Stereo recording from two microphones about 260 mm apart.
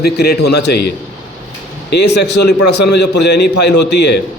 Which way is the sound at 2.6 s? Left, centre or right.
Left.